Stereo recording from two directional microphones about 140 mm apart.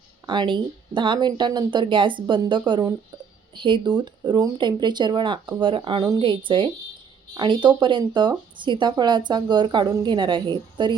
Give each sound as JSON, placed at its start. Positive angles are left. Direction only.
{"t": 0.3, "sound": "speech", "side_deg": -35}